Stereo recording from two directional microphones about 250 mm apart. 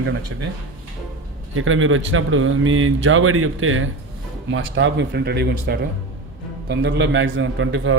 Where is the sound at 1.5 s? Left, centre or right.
Right.